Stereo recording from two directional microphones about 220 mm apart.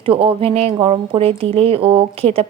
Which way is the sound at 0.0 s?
25° right (ahead or behind).